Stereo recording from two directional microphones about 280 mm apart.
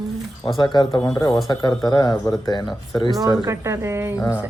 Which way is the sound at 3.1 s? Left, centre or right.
Centre.